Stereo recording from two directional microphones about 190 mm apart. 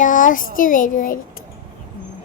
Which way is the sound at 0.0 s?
45° left (ahead or behind).